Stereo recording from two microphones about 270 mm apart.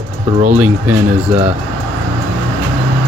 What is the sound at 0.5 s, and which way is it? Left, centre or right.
Speech, centre.